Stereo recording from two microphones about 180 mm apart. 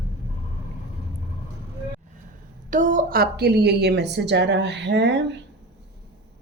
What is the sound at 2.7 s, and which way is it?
A woman's voice, 45° right (ahead or behind).